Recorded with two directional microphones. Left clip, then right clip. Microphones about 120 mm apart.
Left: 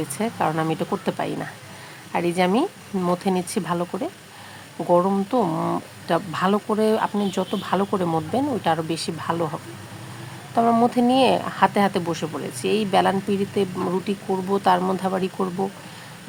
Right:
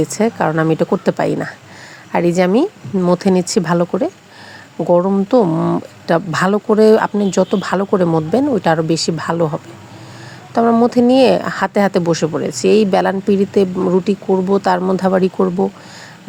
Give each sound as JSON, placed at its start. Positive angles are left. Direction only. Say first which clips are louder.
{"t": 0.1, "sound": "speech", "louder": "right 8 dB", "side_deg": -45}
{"t": 5.5, "sound": "speech", "louder": "right 7 dB", "side_deg": -25}
{"t": 6.1, "sound": "speech", "louder": "right 7 dB", "side_deg": -55}
{"t": 7.6, "sound": "speech", "louder": "right 5 dB", "side_deg": -55}
{"t": 7.9, "sound": "speech", "louder": "right 9 dB", "side_deg": -40}
{"t": 10.5, "sound": "speech", "louder": "right 5 dB", "side_deg": -30}
{"t": 10.8, "sound": "speech", "louder": "right 7 dB", "side_deg": -45}